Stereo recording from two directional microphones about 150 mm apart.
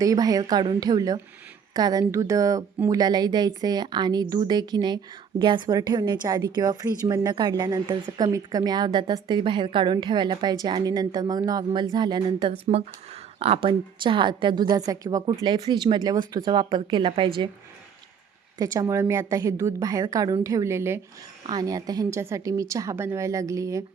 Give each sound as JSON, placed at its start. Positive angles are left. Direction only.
{"t": 0.0, "sound": "a woman's voice", "side_deg": -25}
{"t": 18.6, "sound": "a woman's voice", "side_deg": -25}